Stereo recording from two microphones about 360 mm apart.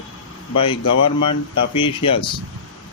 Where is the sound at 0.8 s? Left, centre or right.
Left.